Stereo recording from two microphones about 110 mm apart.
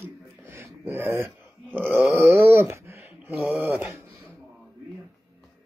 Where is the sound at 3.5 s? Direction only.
15° right (ahead or behind).